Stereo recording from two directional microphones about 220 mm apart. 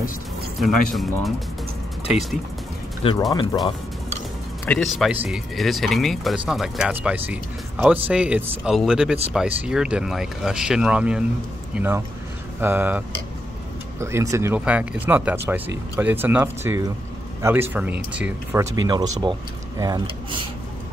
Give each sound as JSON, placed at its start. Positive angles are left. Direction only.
{"t": 0.6, "sound": "speech", "side_deg": 0}
{"t": 3.0, "sound": "speech", "side_deg": 25}
{"t": 4.6, "sound": "speech", "side_deg": 0}
{"t": 18.9, "sound": "speech", "side_deg": -20}